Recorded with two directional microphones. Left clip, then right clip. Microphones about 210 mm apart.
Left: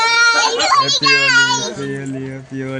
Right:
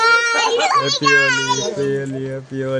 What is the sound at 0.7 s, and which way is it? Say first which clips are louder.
A child's voice: left 2 dB; 25° left (ahead or behind).